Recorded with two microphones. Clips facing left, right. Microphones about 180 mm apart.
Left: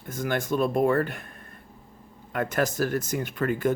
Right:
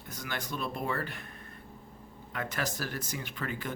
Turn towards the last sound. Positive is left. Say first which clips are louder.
# left 12 dB
turn(degrees=50)  # may be behind; listen again after turning